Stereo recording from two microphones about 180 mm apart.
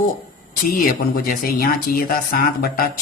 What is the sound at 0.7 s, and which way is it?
Speech, 55° left (ahead or behind).